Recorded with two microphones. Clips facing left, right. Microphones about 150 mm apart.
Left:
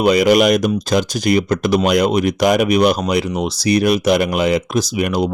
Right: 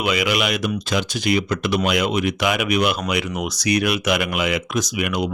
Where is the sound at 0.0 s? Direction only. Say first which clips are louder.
Left 9 dB; 40° left (ahead or behind).